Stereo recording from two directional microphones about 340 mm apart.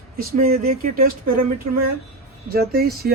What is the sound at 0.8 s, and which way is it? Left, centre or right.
Speech, right.